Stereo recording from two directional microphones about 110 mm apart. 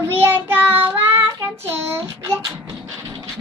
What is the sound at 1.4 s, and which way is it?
Child singing, 20° right (ahead or behind).